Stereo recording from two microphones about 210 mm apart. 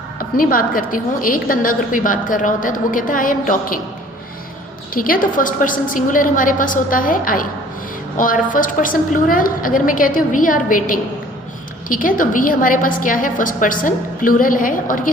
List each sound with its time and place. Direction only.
0.2 s a woman's voice: 40° left (ahead or behind)
4.9 s a woman's voice: 40° left (ahead or behind)